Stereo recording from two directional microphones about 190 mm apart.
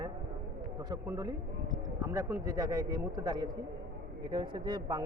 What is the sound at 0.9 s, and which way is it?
A man's voice, 20° right (ahead or behind).